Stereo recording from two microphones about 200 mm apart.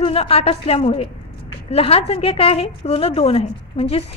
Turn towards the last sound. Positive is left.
turn(degrees=30)  # may be behind; listen again after turning